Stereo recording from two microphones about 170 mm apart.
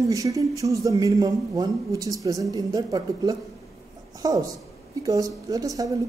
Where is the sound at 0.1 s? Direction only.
20° right (ahead or behind).